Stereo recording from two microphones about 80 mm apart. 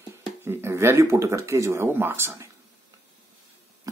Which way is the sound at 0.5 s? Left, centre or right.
Right.